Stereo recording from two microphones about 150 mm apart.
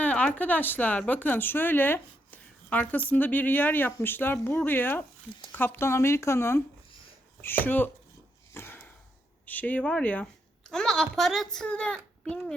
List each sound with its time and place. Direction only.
0.0 s speech: 10° left (ahead or behind)
8.5 s sniff: 15° left (ahead or behind)
9.5 s a woman's voice: 10° left (ahead or behind)